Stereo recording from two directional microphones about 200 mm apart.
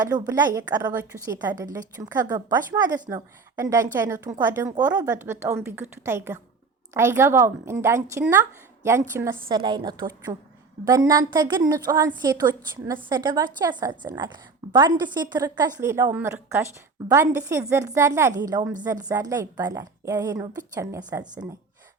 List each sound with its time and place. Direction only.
0.0 s a woman's voice: 20° right (ahead or behind)